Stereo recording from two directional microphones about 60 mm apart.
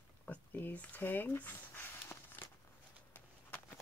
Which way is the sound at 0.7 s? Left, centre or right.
Left.